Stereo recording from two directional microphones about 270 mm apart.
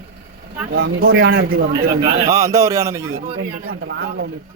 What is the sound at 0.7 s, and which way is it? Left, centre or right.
Speech, right.